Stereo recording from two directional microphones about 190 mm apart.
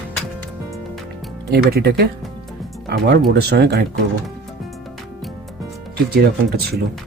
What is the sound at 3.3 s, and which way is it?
Speech, 60° right (ahead or behind).